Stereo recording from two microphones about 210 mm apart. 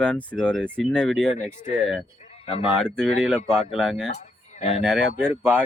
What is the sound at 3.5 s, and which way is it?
Speech, 5° right (ahead or behind).